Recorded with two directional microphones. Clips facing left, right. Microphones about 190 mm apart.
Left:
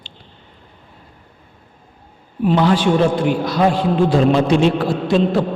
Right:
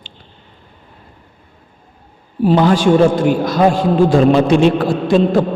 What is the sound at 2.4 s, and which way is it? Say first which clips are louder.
A man's voice: right 3 dB; 40° right (ahead or behind).